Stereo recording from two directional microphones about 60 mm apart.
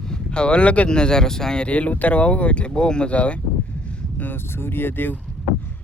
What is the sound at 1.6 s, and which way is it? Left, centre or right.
Speech, left.